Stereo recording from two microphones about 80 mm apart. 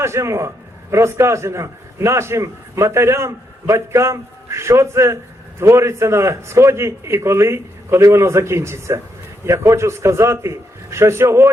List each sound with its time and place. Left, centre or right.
0.0 s a man's voice: right